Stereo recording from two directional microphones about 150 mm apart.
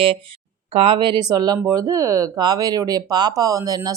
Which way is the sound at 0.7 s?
40° right (ahead or behind).